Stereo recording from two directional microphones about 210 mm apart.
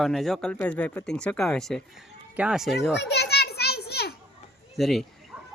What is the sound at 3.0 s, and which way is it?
Children playing, 50° left (ahead or behind).